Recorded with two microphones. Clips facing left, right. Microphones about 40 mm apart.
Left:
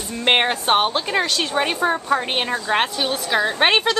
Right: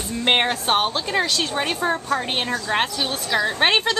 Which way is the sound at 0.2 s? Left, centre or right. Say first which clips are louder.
Left 2 dB; centre.